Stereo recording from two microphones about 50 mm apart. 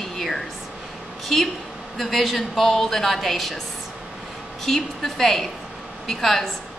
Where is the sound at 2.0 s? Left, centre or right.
Centre.